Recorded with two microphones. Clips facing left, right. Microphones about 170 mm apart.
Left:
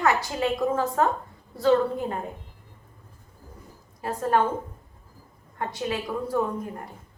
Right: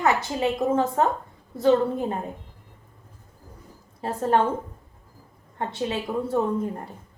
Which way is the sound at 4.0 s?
25° right (ahead or behind).